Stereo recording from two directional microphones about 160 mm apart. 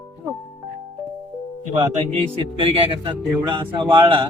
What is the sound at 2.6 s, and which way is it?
Speech, 35° right (ahead or behind).